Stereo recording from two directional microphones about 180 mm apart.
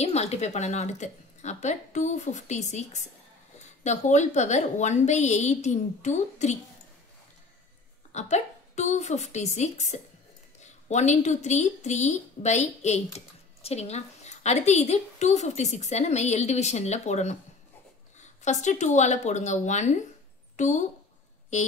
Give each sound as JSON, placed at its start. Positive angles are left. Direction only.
{"t": 0.0, "sound": "speech", "side_deg": 35}
{"t": 8.1, "sound": "speech", "side_deg": 40}
{"t": 18.4, "sound": "a woman's voice", "side_deg": 40}